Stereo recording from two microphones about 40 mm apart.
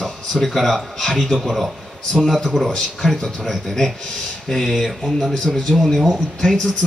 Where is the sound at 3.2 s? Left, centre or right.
Centre.